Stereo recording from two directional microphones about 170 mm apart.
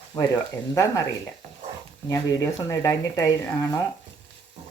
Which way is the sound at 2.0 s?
15° left (ahead or behind).